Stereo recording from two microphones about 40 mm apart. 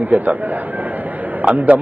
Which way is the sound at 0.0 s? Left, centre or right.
Right.